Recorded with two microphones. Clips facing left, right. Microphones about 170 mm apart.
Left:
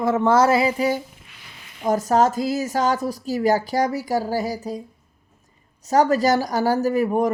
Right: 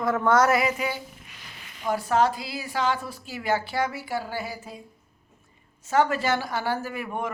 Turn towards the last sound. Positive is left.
turn(degrees=40)  # may be behind; listen again after turning